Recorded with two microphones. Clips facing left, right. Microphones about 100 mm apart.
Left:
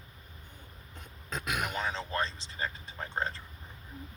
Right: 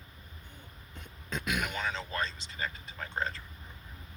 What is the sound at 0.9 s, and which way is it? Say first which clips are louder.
Speech: even; 40° left (ahead or behind).